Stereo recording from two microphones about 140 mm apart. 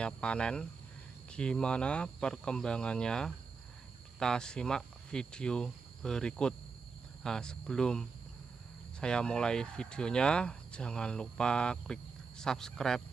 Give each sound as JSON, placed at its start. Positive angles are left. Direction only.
{"t": 0.0, "sound": "speech", "side_deg": 5}